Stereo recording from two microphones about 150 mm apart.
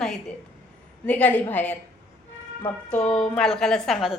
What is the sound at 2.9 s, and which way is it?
Speech, 5° left (ahead or behind).